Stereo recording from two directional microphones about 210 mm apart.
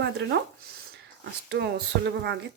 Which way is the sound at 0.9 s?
55° right (ahead or behind).